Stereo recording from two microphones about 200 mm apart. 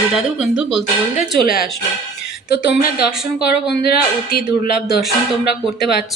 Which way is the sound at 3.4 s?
50° left (ahead or behind).